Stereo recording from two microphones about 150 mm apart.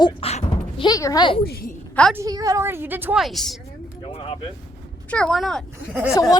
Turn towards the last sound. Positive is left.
turn(degrees=-10)  # may be behind; listen again after turning